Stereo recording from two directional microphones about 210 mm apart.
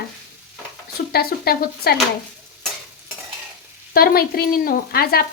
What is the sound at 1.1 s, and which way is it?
Speech, 50° left (ahead or behind).